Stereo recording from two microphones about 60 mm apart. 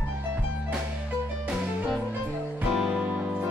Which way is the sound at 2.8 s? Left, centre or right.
Centre.